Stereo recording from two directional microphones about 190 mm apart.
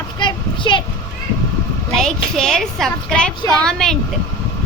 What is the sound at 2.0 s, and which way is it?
Speech, 5° left (ahead or behind).